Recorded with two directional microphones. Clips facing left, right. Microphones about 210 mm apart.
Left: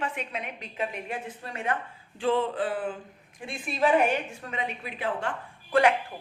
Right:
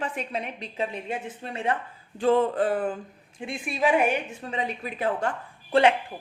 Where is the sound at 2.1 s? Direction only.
45° right (ahead or behind).